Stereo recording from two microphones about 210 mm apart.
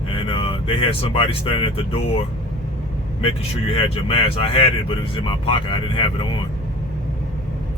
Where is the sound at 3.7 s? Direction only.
25° left (ahead or behind).